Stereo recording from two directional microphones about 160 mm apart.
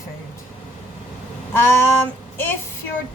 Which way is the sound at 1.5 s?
15° left (ahead or behind).